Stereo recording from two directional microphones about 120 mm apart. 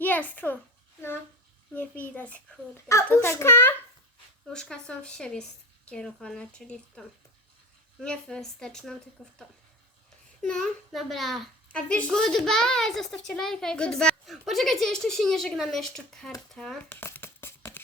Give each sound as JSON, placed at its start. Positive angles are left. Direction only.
{"t": 0.0, "sound": "a child's voice", "side_deg": 15}
{"t": 1.7, "sound": "a child's voice", "side_deg": 15}
{"t": 4.4, "sound": "a child's voice", "side_deg": 5}
{"t": 8.0, "sound": "a child's voice", "side_deg": 5}
{"t": 10.4, "sound": "a child's voice", "side_deg": 10}
{"t": 16.9, "sound": "a sound", "side_deg": 15}